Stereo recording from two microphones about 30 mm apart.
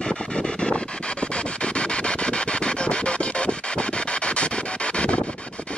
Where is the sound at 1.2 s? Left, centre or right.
Left.